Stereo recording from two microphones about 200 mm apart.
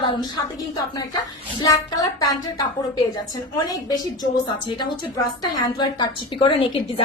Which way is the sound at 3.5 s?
20° left (ahead or behind).